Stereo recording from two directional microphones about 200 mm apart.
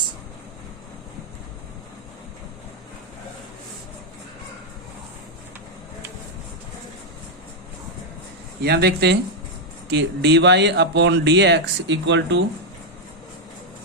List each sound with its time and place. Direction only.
8.6 s speech: 55° right (ahead or behind)